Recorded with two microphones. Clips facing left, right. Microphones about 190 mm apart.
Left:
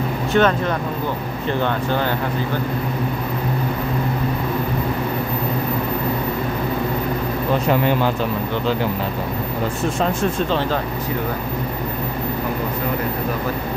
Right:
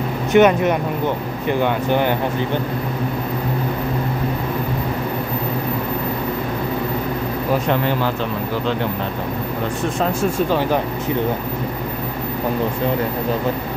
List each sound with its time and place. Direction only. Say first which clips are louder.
0.3 s speech: right 5 dB; 15° right (ahead or behind)
7.6 s speech: left 1 dB; 10° left (ahead or behind)